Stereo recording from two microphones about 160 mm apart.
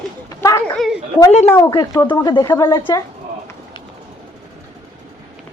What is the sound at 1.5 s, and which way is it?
Speech, 20° left (ahead or behind).